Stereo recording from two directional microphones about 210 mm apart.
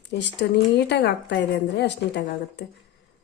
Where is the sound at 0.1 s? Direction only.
55° left (ahead or behind).